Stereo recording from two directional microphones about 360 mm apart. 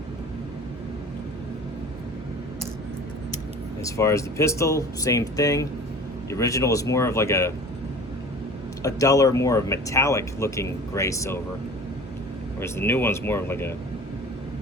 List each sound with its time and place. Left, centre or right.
3.8 s speech: centre
8.8 s speech: centre
12.5 s speech: centre